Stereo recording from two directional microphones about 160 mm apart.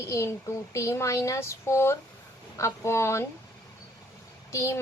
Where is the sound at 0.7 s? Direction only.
20° left (ahead or behind).